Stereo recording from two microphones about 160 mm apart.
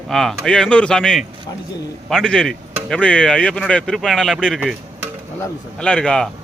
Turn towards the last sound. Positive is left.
turn(degrees=5)  # may be behind; listen again after turning